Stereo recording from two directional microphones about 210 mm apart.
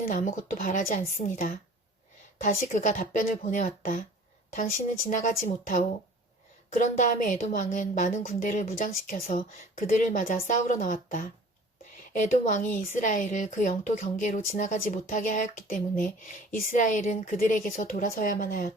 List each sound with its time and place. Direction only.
0.1 s a woman's voice: 35° left (ahead or behind)